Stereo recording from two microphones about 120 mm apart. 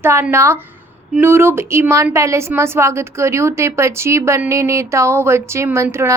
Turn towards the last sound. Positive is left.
turn(degrees=-20)  # may be behind; listen again after turning